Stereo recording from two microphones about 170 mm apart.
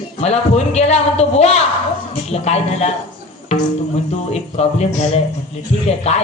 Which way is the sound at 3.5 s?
40° left (ahead or behind).